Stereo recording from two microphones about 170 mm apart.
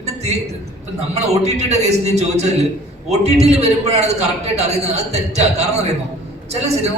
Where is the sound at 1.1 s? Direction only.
40° right (ahead or behind).